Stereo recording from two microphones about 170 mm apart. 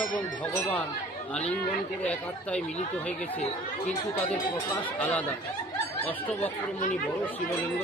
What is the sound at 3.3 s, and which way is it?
Speech, 45° left (ahead or behind).